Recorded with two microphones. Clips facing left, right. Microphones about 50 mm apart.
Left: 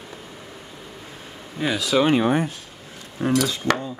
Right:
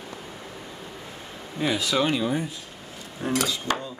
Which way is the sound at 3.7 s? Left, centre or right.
Left.